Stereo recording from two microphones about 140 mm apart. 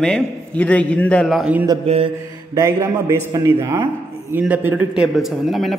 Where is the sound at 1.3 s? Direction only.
Centre (ahead or behind).